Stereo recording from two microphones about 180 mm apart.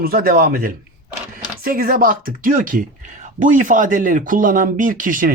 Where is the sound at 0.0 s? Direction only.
55° right (ahead or behind).